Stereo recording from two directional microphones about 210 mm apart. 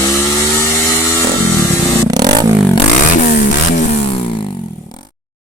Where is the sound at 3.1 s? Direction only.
35° left (ahead or behind).